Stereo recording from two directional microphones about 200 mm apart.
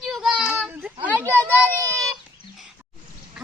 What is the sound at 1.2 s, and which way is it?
Speech, 10° left (ahead or behind).